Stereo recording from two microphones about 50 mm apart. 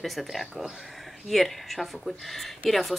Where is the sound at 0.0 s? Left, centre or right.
Centre.